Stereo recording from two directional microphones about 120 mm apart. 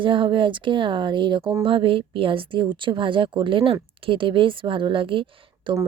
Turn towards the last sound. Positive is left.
turn(degrees=-45)  # may be behind; listen again after turning